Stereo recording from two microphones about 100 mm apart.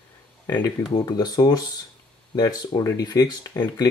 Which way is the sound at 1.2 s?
45° left (ahead or behind).